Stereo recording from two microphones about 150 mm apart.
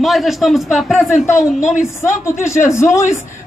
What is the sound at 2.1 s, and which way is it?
Speech, 55° left (ahead or behind).